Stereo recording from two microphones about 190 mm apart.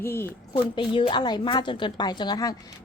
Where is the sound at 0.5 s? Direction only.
25° left (ahead or behind).